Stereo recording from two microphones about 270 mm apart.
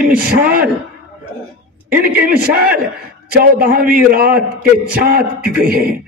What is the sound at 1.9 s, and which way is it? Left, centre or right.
A man's voice, right.